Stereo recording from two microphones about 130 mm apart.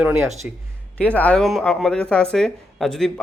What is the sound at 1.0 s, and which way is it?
Speech, 10° left (ahead or behind).